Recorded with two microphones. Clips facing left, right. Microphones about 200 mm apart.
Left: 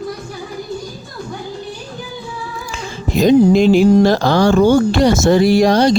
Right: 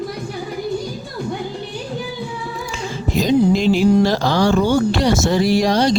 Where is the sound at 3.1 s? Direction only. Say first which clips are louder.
Left 5 dB; 55° left (ahead or behind).